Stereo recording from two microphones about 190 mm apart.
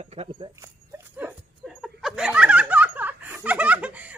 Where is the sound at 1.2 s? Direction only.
5° right (ahead or behind).